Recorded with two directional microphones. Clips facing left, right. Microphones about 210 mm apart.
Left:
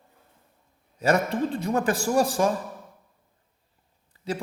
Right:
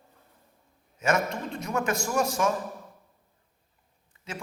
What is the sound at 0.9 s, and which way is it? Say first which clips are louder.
Speech: left 4 dB; 35° left (ahead or behind).